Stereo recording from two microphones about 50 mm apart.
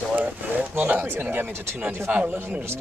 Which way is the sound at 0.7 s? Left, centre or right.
Right.